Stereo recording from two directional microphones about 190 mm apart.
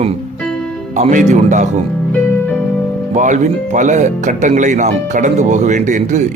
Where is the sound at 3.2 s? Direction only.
40° right (ahead or behind).